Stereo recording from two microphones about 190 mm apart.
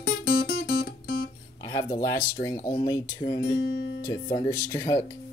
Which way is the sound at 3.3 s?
90° left.